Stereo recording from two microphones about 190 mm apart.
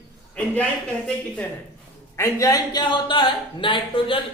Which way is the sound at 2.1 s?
15° left (ahead or behind).